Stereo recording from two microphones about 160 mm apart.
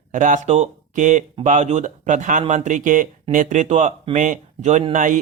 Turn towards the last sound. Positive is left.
turn(degrees=-55)  # may be behind; listen again after turning